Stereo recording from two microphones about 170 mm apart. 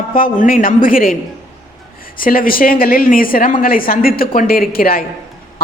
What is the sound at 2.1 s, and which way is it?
A man's voice, 55° left (ahead or behind).